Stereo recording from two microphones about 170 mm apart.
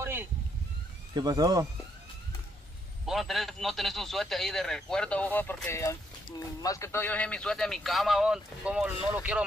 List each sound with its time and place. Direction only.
0.0 s a sound: 15° right (ahead or behind)
1.1 s speech: 20° right (ahead or behind)
3.1 s speech: centre (ahead or behind)